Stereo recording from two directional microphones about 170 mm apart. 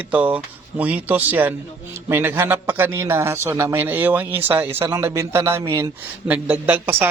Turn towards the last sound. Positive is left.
turn(degrees=-10)  # may be behind; listen again after turning